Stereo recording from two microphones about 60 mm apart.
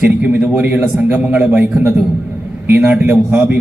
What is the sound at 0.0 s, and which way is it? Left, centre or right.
A man's voice, right.